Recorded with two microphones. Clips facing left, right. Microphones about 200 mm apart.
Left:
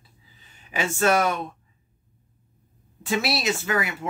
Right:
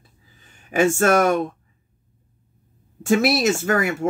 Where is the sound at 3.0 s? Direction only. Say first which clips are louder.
Right 8 dB; 50° right (ahead or behind).